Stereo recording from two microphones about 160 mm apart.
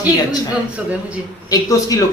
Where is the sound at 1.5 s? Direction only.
20° left (ahead or behind).